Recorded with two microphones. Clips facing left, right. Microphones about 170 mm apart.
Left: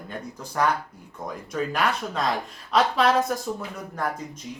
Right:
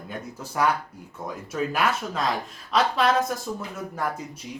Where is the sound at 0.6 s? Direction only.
10° right (ahead or behind).